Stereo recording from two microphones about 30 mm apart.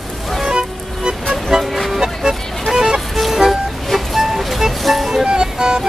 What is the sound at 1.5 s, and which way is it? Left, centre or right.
Toot, centre.